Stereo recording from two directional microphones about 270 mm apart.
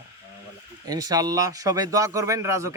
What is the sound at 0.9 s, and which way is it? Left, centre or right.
Speech, centre.